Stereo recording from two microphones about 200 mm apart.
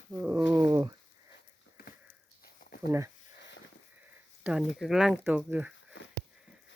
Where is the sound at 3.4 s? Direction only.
65° left (ahead or behind).